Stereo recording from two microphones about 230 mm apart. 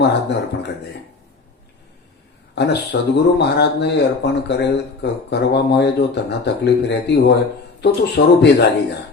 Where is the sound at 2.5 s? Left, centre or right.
Left.